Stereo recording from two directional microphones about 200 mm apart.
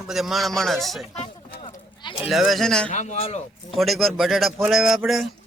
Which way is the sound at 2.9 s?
35° left (ahead or behind).